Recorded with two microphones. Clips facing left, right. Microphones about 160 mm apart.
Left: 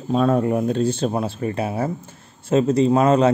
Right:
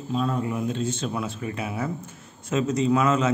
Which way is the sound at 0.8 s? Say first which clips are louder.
Left 7 dB; 40° left (ahead or behind).